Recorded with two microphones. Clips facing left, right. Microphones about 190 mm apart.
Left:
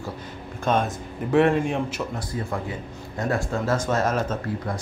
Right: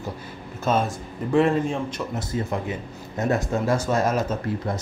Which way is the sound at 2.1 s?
20° right (ahead or behind).